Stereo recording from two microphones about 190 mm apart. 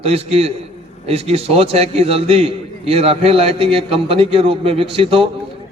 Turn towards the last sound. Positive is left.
turn(degrees=-30)  # may be behind; listen again after turning